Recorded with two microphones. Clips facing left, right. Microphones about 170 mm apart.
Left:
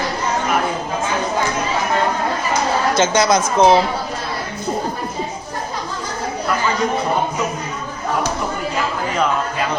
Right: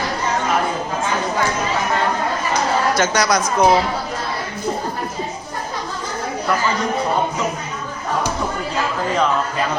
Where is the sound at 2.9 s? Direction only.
25° left (ahead or behind).